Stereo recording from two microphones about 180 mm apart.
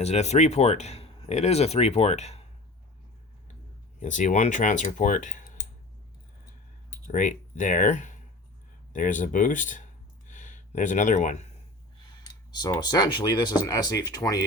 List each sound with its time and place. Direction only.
0.0 s speech: 35° left (ahead or behind)
4.0 s speech: 45° left (ahead or behind)
7.1 s speech: 45° left (ahead or behind)
10.2 s a sound: 45° left (ahead or behind)
12.5 s speech: 25° left (ahead or behind)